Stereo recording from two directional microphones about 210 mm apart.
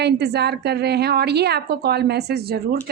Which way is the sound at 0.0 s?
50° right (ahead or behind).